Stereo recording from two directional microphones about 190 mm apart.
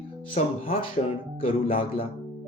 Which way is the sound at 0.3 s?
30° left (ahead or behind).